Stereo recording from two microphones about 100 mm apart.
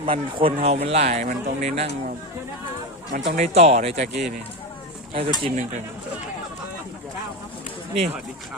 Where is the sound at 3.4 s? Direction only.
90° right.